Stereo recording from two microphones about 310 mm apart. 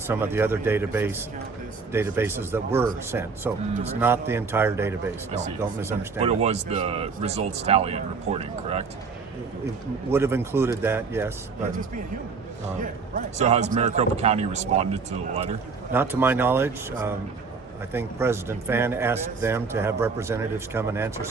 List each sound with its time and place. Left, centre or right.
0.1 s speech: centre
6.2 s speech: centre
10.1 s speech: centre
12.8 s speech: right
15.9 s speech: centre